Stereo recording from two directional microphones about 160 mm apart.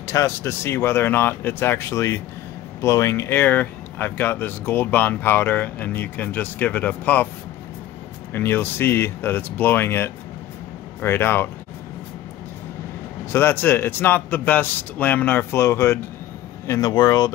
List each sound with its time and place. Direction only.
0.0 s speech: 20° left (ahead or behind)
8.3 s speech: 15° left (ahead or behind)
13.3 s speech: 15° left (ahead or behind)